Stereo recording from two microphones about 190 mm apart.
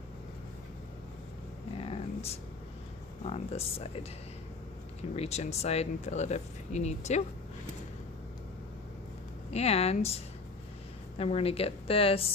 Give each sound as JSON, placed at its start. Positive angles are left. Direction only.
{"t": 1.8, "sound": "a sound", "side_deg": 30}
{"t": 3.2, "sound": "speech", "side_deg": 35}
{"t": 5.1, "sound": "speech", "side_deg": 35}
{"t": 9.5, "sound": "speech", "side_deg": 35}
{"t": 11.2, "sound": "speech", "side_deg": 30}